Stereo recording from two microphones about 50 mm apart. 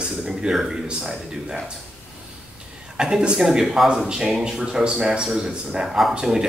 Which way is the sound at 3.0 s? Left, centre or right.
Centre.